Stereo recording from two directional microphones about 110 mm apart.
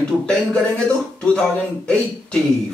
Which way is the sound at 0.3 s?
5° left (ahead or behind).